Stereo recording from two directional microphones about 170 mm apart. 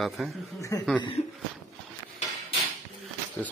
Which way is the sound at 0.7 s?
20° left (ahead or behind).